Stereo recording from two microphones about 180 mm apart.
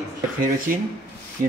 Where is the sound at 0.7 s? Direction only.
55° right (ahead or behind).